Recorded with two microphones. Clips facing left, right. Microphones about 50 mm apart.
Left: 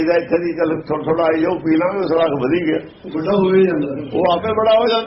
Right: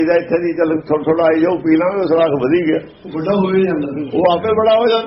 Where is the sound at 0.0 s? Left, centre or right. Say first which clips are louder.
Right 2 dB; right.